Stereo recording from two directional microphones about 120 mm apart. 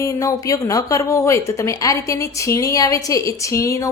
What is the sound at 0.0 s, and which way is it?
A woman's voice, 25° left (ahead or behind).